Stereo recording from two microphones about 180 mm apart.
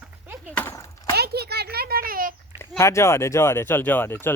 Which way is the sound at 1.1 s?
60° right (ahead or behind).